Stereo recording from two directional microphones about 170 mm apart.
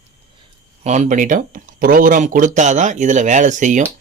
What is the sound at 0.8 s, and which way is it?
Speech, 45° right (ahead or behind).